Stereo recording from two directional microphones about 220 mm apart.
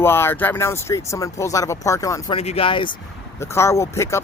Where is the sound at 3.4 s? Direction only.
10° left (ahead or behind).